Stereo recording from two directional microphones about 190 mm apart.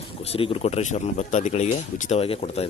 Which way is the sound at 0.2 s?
30° left (ahead or behind).